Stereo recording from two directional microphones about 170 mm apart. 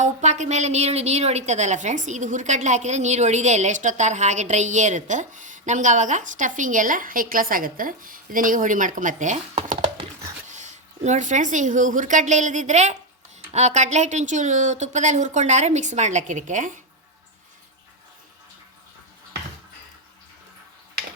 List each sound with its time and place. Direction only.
0.0 s a woman's voice: 45° right (ahead or behind)